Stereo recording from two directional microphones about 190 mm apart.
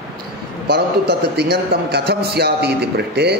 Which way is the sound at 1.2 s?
60° right (ahead or behind).